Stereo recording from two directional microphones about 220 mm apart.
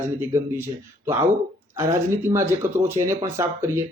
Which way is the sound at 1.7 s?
10° right (ahead or behind).